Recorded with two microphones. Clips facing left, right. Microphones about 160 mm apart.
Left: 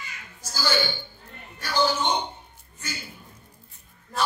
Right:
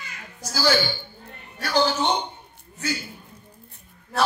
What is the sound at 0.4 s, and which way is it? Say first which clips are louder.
Speech: right 6 dB; 75° right (ahead or behind).